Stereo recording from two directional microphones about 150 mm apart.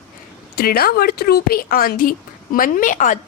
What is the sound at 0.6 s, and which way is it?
A woman's voice, 90° left.